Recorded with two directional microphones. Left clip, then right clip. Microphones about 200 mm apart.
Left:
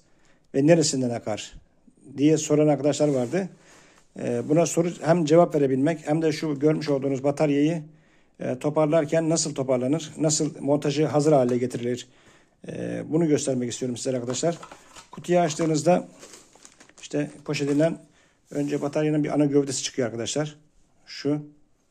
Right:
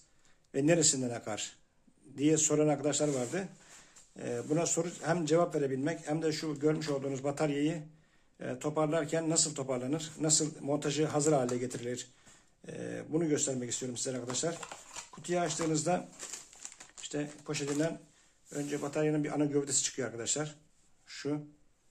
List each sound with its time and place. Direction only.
0.5 s a man's voice: 30° left (ahead or behind)
17.0 s a man's voice: 35° left (ahead or behind)